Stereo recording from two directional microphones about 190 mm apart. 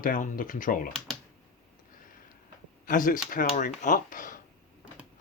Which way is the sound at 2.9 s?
45° left (ahead or behind).